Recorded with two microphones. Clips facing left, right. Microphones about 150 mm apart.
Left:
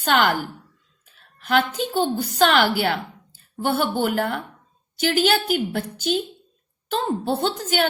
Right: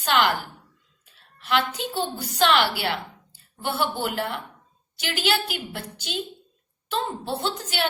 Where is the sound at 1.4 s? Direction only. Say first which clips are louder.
Left 4 dB; 45° left (ahead or behind).